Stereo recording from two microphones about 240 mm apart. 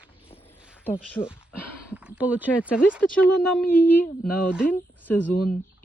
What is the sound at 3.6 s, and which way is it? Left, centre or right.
Speech, centre.